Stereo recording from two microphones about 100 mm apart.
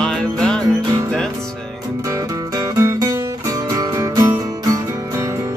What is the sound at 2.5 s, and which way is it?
Music, 30° right (ahead or behind).